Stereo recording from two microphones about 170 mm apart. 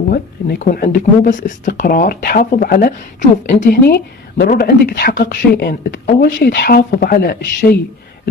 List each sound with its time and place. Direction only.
0.1 s speech: 55° left (ahead or behind)